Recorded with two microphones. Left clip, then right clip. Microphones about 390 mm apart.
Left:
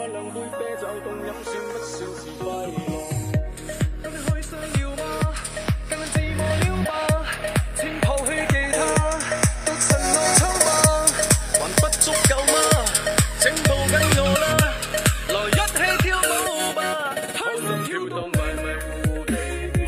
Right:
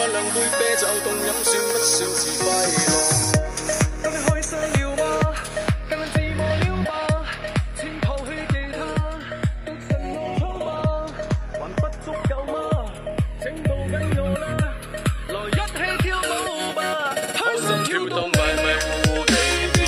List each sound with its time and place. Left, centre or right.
0.0 s music: right
1.5 s music: right
2.8 s music: right
4.3 s music: centre; by 10.4 s left
10.6 s music: left; by 19.8 s right